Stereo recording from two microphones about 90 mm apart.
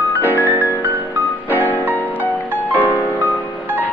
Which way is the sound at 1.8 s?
20° right (ahead or behind).